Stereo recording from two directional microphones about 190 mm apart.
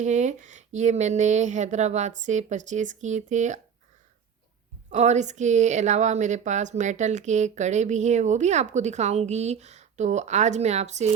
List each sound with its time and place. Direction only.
0.0 s speech: 40° right (ahead or behind)
4.9 s speech: 40° right (ahead or behind)